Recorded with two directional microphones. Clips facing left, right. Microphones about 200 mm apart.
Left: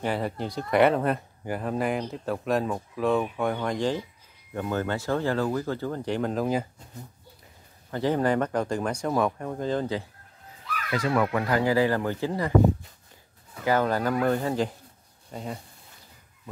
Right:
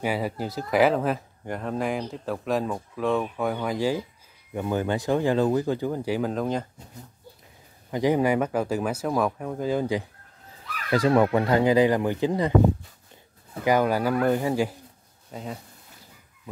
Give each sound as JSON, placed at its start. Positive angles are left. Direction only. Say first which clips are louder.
{"t": 0.0, "sound": "speech", "louder": "right 1 dB", "side_deg": -5}
{"t": 7.9, "sound": "speech", "louder": "right 2 dB", "side_deg": -15}
{"t": 10.9, "sound": "speech", "louder": "right 5 dB", "side_deg": -35}
{"t": 13.7, "sound": "speech", "louder": "right 2 dB", "side_deg": -10}